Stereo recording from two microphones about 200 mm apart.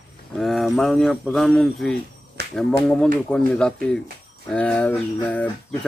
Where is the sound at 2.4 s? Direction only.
55° right (ahead or behind).